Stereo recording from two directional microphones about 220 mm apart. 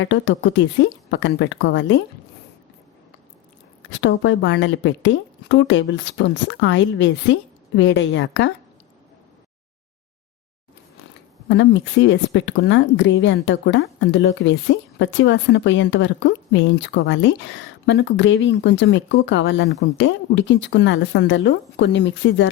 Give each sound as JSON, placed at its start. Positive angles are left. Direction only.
{"t": 0.0, "sound": "speech", "side_deg": 55}
{"t": 4.0, "sound": "speech", "side_deg": 55}
{"t": 11.4, "sound": "speech", "side_deg": 55}